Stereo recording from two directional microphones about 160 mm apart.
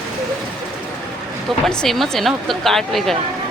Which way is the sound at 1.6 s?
Centre (ahead or behind).